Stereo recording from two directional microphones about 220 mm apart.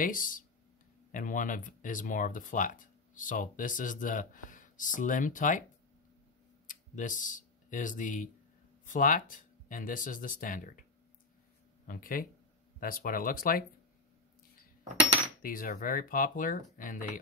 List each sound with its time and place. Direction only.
0.0 s speech: 40° left (ahead or behind)
6.7 s speech: 35° left (ahead or behind)
11.9 s speech: 40° left (ahead or behind)
15.4 s speech: 40° left (ahead or behind)